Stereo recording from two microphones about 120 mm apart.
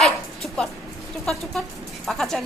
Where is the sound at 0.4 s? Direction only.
5° left (ahead or behind).